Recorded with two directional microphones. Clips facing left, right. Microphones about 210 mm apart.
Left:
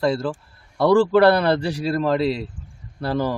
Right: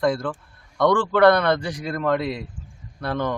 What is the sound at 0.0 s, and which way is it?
A man's voice, 25° left (ahead or behind).